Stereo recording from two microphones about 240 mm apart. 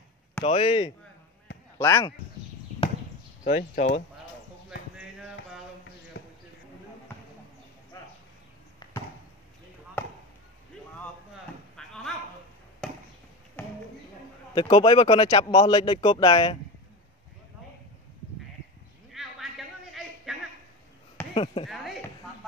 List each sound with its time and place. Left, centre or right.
0.4 s speech: left
1.8 s speech: centre
2.8 s chop: left
3.4 s speech: left
11.7 s a sound: centre
14.5 s speech: centre
19.2 s a sound: centre
21.5 s speech: left